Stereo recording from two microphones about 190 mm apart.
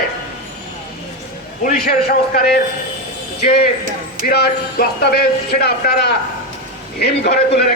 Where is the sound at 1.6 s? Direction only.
50° left (ahead or behind).